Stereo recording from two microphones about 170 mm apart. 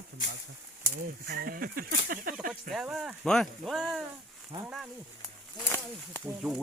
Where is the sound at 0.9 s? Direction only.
65° right (ahead or behind).